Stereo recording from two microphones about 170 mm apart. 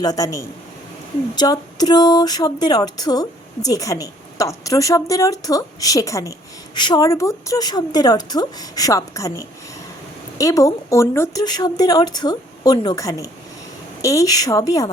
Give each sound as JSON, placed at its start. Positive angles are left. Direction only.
{"t": 0.0, "sound": "speech", "side_deg": 20}